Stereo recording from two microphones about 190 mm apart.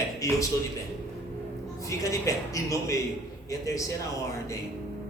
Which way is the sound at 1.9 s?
15° left (ahead or behind).